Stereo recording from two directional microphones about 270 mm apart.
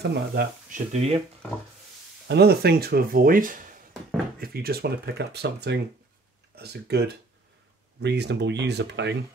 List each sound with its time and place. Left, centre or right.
0.1 s speech: right
0.9 s speech: right
2.2 s speech: right